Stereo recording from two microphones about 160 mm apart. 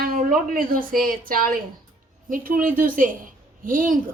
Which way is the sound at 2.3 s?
60° right (ahead or behind).